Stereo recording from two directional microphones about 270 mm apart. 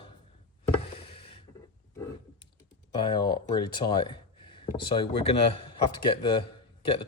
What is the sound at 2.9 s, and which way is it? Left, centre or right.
Speech, centre.